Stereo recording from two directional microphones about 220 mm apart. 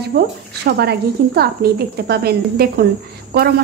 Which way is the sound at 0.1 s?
40° right (ahead or behind).